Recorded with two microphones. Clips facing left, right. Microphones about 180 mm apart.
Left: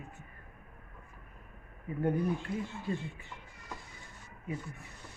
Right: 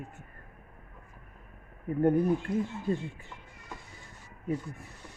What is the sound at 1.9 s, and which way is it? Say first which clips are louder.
A woman's voice: right 6 dB; 50° right (ahead or behind).